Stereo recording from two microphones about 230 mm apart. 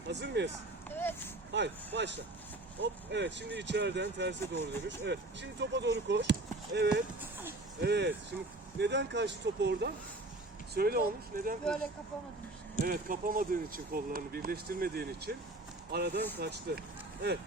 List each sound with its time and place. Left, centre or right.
0.1 s speech: right
0.9 s a sound: centre
1.5 s speech: right
7.2 s a sound: centre
7.8 s speech: right
11.6 s speech: centre
12.8 s speech: right